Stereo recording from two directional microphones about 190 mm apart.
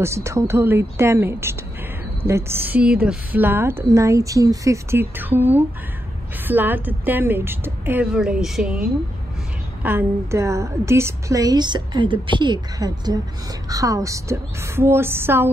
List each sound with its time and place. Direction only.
0.0 s a woman's voice: 15° right (ahead or behind)
9.8 s a woman's voice: 15° right (ahead or behind)